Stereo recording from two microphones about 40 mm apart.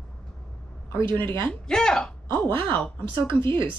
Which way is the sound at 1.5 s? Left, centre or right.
Centre.